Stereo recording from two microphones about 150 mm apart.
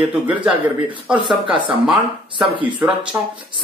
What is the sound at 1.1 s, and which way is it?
Speech, 35° right (ahead or behind).